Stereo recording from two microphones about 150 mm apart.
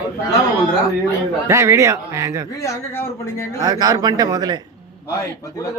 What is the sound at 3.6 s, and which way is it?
Speech, 25° right (ahead or behind).